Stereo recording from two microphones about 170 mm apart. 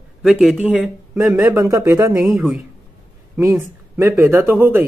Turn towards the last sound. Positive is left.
turn(degrees=-10)  # may be behind; listen again after turning